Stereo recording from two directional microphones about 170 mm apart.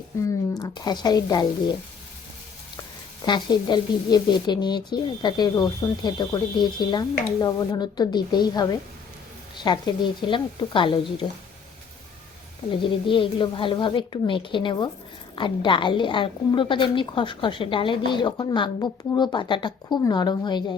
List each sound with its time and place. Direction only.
0.6 s a woman's voice: 25° left (ahead or behind)
3.2 s a woman's voice: 25° left (ahead or behind)
12.8 s a woman's voice: 30° left (ahead or behind)